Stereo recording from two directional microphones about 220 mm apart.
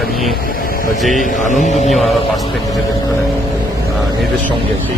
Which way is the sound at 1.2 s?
35° left (ahead or behind).